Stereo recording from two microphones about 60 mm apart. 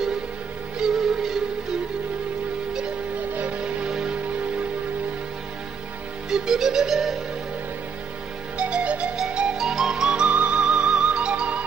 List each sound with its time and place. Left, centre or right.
0.8 s music: centre
3.3 s music: centre
6.3 s music: centre
8.5 s music: centre